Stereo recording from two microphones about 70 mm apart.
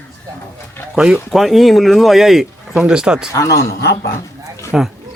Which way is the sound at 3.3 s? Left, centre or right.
Left.